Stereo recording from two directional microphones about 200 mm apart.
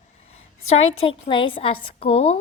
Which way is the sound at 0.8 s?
90° left.